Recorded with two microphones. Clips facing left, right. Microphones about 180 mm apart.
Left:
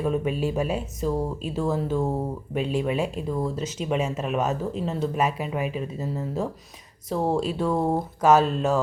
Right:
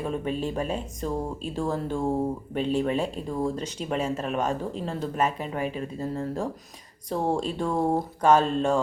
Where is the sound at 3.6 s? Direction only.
35° right (ahead or behind).